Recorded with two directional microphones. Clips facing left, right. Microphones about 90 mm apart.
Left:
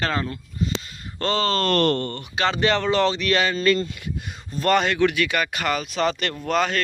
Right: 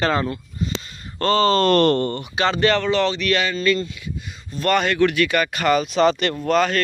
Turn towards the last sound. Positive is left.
turn(degrees=10)  # may be behind; listen again after turning